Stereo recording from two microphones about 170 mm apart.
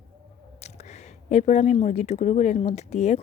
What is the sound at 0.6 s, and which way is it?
Speech, 40° left (ahead or behind).